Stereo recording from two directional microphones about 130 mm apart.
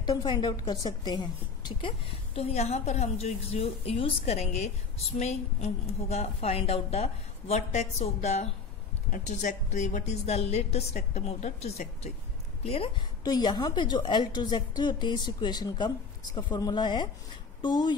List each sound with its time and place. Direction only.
0.0 s a woman's voice: 35° left (ahead or behind); by 8.5 s 55° left (ahead or behind)
9.1 s a woman's voice: 70° left (ahead or behind); by 13.0 s 45° left (ahead or behind)
13.2 s a woman's voice: 35° left (ahead or behind)